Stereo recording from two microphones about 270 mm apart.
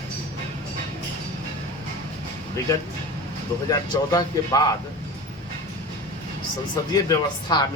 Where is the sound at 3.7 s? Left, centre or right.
Centre.